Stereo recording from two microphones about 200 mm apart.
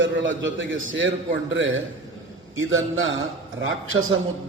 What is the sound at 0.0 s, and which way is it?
A man's voice, 70° right (ahead or behind).